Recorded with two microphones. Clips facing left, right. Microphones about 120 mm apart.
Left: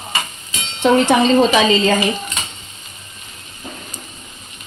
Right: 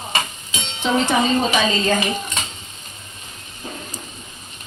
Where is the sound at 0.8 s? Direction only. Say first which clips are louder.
Left 6 dB; 75° left (ahead or behind); by 1.8 s 90° left.